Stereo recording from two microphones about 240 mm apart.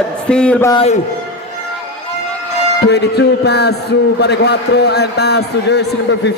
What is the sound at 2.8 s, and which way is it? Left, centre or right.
A man's voice, left.